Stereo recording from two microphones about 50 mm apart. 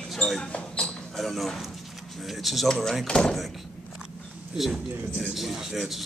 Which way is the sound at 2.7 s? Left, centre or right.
Centre.